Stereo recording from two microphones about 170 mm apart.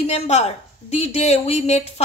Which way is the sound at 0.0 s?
40° left (ahead or behind).